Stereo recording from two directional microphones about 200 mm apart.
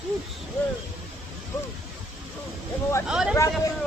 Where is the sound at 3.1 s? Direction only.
5° right (ahead or behind).